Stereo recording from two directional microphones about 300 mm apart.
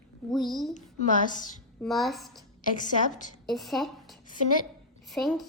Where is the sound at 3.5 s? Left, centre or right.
Centre.